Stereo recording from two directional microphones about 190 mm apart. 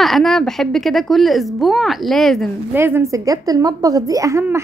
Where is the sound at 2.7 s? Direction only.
10° right (ahead or behind).